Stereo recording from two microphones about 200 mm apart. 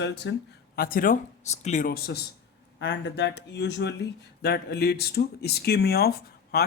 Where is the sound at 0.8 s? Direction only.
45° left (ahead or behind).